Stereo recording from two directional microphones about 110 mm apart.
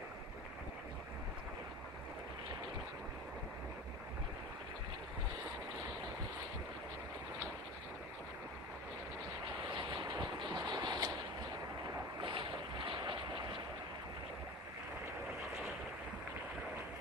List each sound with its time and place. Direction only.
10.1 s vehicle: 40° right (ahead or behind)
12.2 s boat: 50° right (ahead or behind)